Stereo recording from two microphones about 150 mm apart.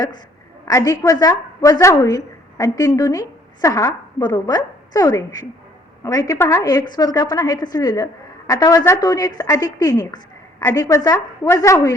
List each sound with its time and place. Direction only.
0.7 s a woman's voice: 20° left (ahead or behind)